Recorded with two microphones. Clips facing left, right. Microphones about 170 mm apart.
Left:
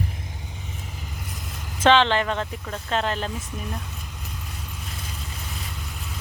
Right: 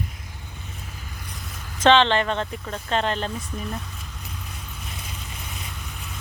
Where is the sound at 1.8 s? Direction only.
5° left (ahead or behind).